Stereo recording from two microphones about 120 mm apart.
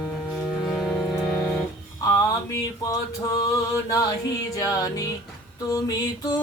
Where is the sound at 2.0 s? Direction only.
25° left (ahead or behind).